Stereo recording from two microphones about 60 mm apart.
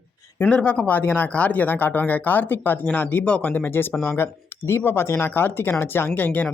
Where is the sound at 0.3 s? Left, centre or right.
Left.